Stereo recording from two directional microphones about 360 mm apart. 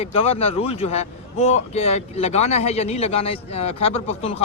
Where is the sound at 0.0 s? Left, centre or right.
Centre.